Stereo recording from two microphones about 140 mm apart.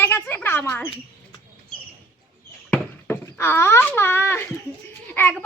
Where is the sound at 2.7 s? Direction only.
15° left (ahead or behind).